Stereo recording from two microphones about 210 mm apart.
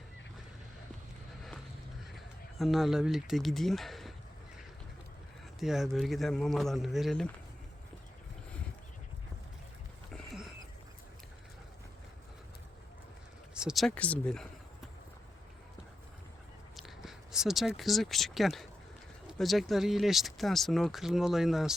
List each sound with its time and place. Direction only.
2.1 s speech: centre (ahead or behind)
5.5 s speech: centre (ahead or behind)
13.5 s speech: 5° right (ahead or behind)
16.7 s speech: centre (ahead or behind)